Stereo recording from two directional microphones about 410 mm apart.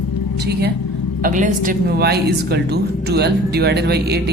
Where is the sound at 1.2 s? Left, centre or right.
Centre.